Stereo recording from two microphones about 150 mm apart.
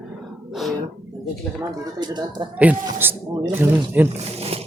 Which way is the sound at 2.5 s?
10° right (ahead or behind).